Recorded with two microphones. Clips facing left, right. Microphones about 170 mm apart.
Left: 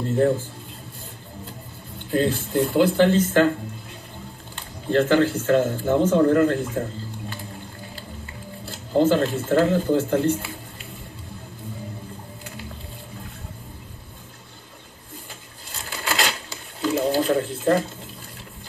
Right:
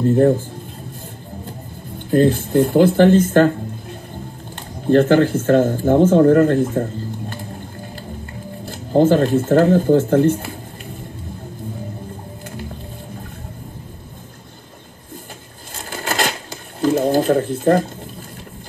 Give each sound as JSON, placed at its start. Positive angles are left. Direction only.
{"t": 2.0, "sound": "speech", "side_deg": -45}
{"t": 4.8, "sound": "speech", "side_deg": -50}
{"t": 8.6, "sound": "speech", "side_deg": -50}
{"t": 15.7, "sound": "a sound", "side_deg": -50}